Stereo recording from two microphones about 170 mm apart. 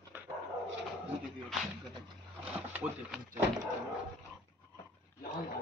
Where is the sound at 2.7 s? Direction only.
Centre (ahead or behind).